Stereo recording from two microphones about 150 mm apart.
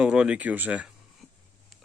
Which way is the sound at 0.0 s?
5° right (ahead or behind).